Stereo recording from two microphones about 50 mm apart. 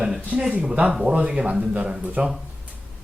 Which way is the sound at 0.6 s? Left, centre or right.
Right.